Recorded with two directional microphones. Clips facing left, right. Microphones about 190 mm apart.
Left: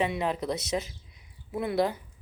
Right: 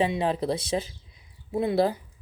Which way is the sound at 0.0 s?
30° right (ahead or behind).